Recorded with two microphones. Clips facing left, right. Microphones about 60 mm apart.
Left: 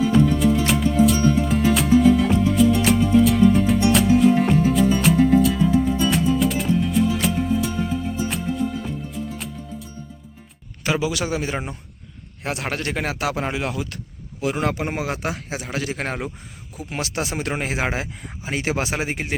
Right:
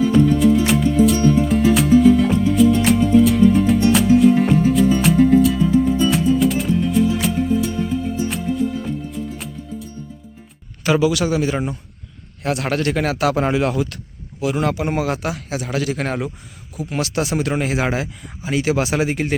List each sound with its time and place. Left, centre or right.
0.0 s music: centre
11.0 s speech: left
13.3 s speech: centre
14.4 s speech: left
18.9 s speech: left